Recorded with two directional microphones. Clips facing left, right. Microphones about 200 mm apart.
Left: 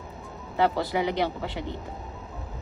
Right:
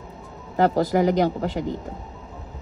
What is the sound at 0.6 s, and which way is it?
A woman's voice, 45° right (ahead or behind).